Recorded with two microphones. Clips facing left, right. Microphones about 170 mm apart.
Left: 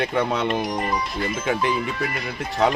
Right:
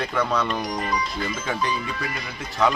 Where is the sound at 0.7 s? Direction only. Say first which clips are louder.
Left 2 dB; 50° left (ahead or behind).